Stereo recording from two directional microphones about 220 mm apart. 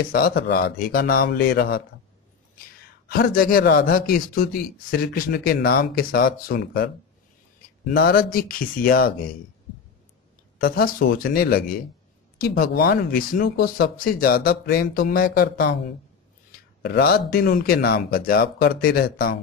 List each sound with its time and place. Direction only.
0.0 s a man's voice: 40° left (ahead or behind)
3.1 s a man's voice: 40° left (ahead or behind)
7.9 s a man's voice: 40° left (ahead or behind)
10.6 s a man's voice: 40° left (ahead or behind)
16.8 s a man's voice: 45° left (ahead or behind)